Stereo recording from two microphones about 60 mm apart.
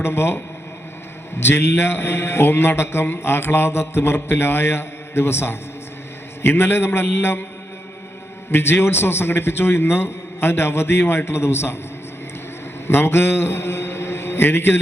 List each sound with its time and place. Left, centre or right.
0.0 s speech: left
1.5 s a man's voice: left
8.5 s a man's voice: left
12.9 s mantra: left